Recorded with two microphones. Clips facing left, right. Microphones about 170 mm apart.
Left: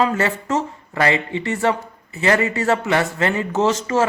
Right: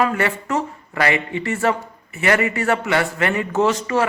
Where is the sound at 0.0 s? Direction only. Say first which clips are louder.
Left 1 dB; 25° left (ahead or behind).